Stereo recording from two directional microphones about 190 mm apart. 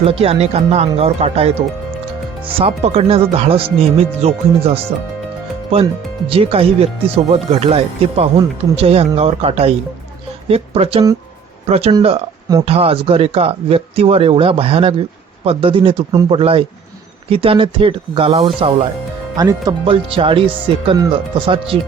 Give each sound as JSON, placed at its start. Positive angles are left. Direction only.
{"t": 0.0, "sound": "speech", "side_deg": -30}
{"t": 2.6, "sound": "speech", "side_deg": -30}